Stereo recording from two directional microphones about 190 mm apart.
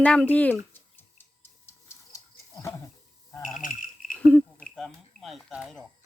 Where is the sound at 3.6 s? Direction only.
45° left (ahead or behind).